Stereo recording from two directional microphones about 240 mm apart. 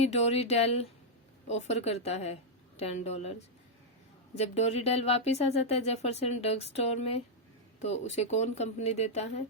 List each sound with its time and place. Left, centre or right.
0.0 s speech: left
4.4 s speech: left